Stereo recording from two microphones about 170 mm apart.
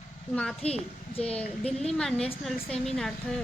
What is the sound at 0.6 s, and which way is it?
Speech, 35° left (ahead or behind).